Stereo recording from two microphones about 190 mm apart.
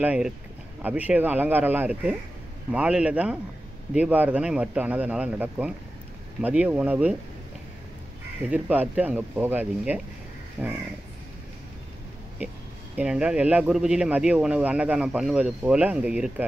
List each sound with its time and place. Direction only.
0.0 s speech: 5° right (ahead or behind)
8.5 s speech: 10° right (ahead or behind)
12.9 s speech: 5° right (ahead or behind)